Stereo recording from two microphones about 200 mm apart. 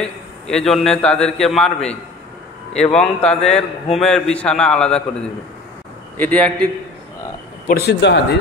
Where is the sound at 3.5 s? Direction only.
30° left (ahead or behind).